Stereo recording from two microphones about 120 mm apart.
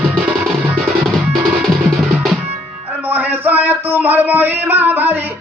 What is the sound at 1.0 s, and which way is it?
Percussion, centre (ahead or behind).